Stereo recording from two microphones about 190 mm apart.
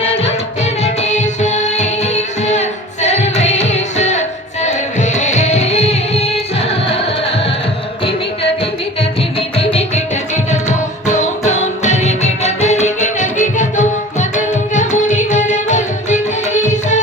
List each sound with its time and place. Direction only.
0.3 s music: 35° left (ahead or behind)
9.6 s music: 35° left (ahead or behind)